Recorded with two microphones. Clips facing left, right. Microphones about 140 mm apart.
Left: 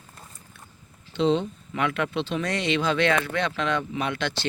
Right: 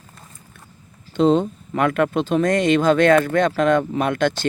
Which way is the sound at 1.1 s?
45° right (ahead or behind).